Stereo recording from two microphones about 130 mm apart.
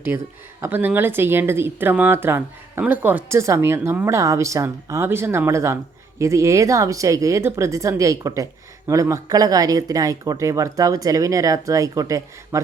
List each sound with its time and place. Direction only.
0.1 s speech: 20° right (ahead or behind)